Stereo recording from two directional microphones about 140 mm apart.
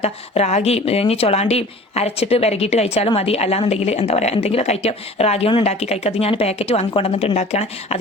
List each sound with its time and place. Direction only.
0.0 s speech: 50° left (ahead or behind)